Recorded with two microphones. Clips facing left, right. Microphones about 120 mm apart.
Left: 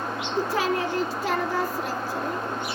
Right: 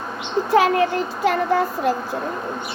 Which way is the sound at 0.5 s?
70° right (ahead or behind).